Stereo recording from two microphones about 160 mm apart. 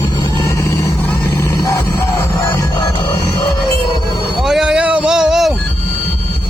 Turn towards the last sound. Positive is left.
turn(degrees=0)  # may be behind; listen again after turning